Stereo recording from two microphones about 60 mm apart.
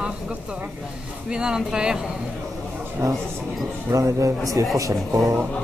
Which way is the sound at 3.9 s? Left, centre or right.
Right.